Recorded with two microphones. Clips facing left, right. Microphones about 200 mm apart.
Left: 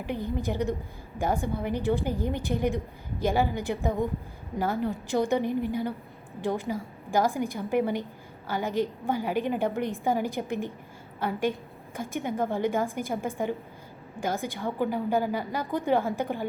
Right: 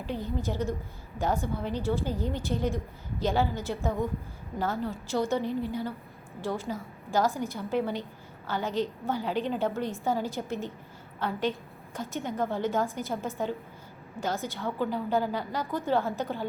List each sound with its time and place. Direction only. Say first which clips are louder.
0.0 s a woman's voice: left 2 dB; 15° left (ahead or behind)